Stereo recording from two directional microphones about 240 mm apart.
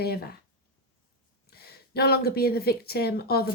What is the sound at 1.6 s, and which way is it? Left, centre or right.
Speech, left.